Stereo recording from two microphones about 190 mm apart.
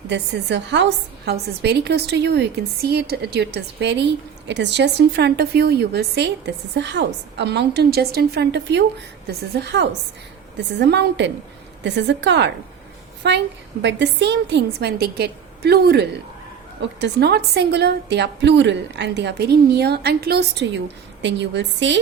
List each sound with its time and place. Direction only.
0.1 s a woman's voice: 65° right (ahead or behind)